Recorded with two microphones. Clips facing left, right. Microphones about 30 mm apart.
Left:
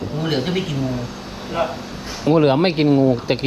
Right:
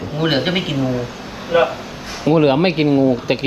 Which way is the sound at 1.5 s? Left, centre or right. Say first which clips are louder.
Right 7 dB; right.